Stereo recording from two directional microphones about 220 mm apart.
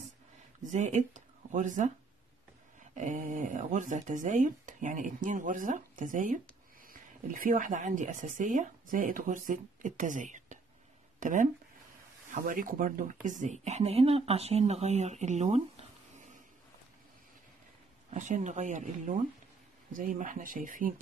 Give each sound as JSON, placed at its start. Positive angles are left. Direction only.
{"t": 0.6, "sound": "speech", "side_deg": -35}
{"t": 3.0, "sound": "speech", "side_deg": -35}
{"t": 18.1, "sound": "speech", "side_deg": -35}